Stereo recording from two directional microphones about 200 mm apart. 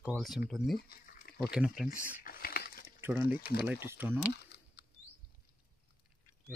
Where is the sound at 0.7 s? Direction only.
50° left (ahead or behind).